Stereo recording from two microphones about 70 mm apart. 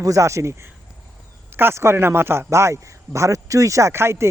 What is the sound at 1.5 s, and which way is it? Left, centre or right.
A man's voice, right.